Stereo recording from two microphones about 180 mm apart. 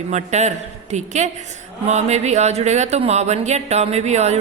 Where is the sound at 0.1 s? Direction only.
40° right (ahead or behind).